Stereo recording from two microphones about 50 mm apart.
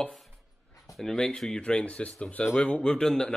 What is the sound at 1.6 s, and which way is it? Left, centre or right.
Speech, left.